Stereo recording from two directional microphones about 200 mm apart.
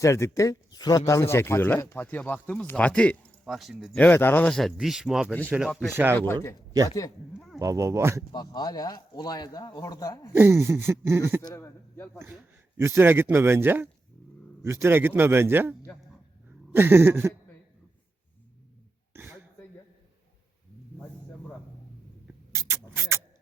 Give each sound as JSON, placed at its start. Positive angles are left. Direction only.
{"t": 0.0, "sound": "speech", "side_deg": 15}
{"t": 5.9, "sound": "a man's voice", "side_deg": -10}
{"t": 6.1, "sound": "speech", "side_deg": 10}
{"t": 7.3, "sound": "a sound", "side_deg": 0}
{"t": 7.6, "sound": "a man's voice", "side_deg": -15}
{"t": 8.3, "sound": "a man's voice", "side_deg": 20}
{"t": 10.3, "sound": "a man's voice", "side_deg": -10}
{"t": 11.4, "sound": "speech", "side_deg": 15}
{"t": 12.7, "sound": "a man's voice", "side_deg": -10}
{"t": 16.7, "sound": "a man's voice", "side_deg": -10}
{"t": 19.1, "sound": "throat clearing", "side_deg": -10}
{"t": 22.5, "sound": "a sound", "side_deg": -10}